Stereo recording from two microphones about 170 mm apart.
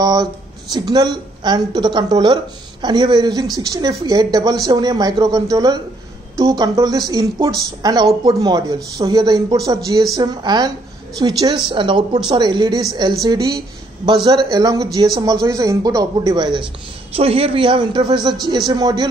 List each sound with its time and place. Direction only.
0.0 s speech: 20° right (ahead or behind)